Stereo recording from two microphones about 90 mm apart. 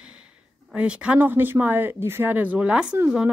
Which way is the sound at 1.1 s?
25° right (ahead or behind).